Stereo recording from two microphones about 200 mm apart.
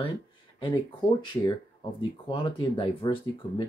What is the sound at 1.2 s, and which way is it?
Speech, 20° left (ahead or behind).